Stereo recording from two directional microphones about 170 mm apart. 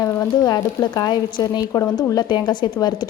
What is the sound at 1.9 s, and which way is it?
Speech, 5° left (ahead or behind).